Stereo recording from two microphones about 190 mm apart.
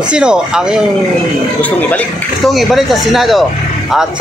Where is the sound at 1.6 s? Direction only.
10° left (ahead or behind).